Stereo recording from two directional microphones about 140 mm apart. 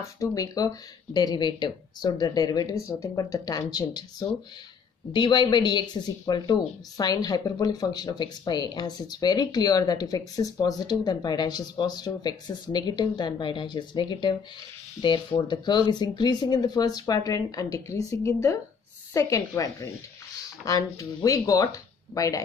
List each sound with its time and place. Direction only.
0.0 s speech: 20° left (ahead or behind)